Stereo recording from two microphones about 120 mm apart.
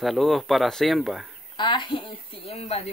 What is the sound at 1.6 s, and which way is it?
Speech, 45° left (ahead or behind).